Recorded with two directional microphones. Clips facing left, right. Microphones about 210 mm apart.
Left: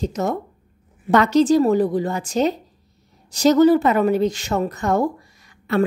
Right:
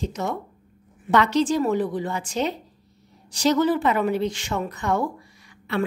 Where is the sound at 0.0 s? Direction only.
40° left (ahead or behind).